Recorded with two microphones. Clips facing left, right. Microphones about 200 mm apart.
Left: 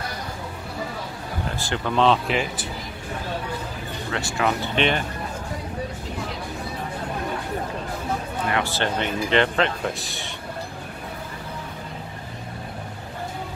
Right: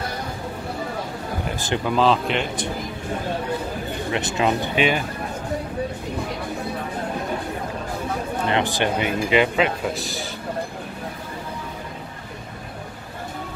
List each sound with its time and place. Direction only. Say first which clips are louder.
1.6 s speech: right 4 dB; 20° right (ahead or behind)
2.0 s a man's voice: even; centre (ahead or behind)
4.1 s speech: right 2 dB; 20° right (ahead or behind)
4.7 s speech: even; 5° right (ahead or behind)
8.5 s speech: right 3 dB; 20° right (ahead or behind); by 10.3 s centre (ahead or behind)